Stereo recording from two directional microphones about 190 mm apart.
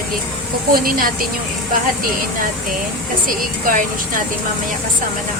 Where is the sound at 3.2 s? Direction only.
45° right (ahead or behind).